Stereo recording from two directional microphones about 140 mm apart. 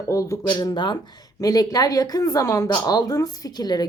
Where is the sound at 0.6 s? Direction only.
35° left (ahead or behind).